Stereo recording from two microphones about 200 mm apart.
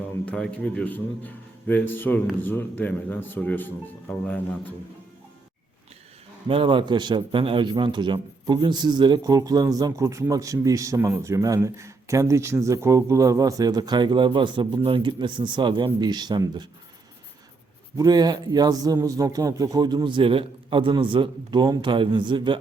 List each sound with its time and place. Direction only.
0.3 s a man's voice: 5° left (ahead or behind)
6.5 s a man's voice: 25° right (ahead or behind)
17.9 s a man's voice: 20° right (ahead or behind)